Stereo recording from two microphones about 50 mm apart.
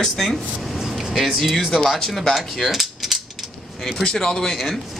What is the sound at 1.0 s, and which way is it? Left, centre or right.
Speech, centre.